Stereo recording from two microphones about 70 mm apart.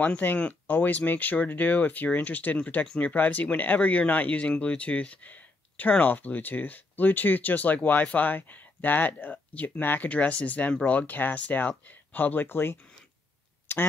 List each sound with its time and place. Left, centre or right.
0.0 s speech: left
13.7 s quack: left